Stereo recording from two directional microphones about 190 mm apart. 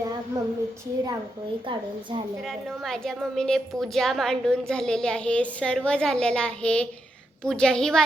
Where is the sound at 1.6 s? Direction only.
25° right (ahead or behind).